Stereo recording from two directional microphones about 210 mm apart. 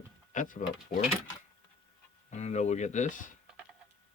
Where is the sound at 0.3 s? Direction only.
40° left (ahead or behind).